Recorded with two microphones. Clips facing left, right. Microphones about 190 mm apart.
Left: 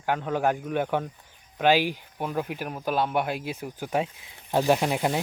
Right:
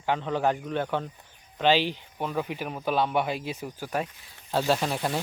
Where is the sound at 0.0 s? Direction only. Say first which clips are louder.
Left 1 dB; 5° left (ahead or behind).